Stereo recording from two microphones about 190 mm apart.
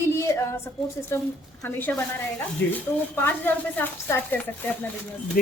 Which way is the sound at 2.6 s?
65° left (ahead or behind).